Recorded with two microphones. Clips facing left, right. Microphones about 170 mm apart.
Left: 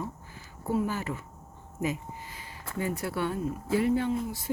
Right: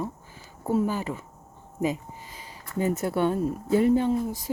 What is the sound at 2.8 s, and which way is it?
Speech, 25° right (ahead or behind).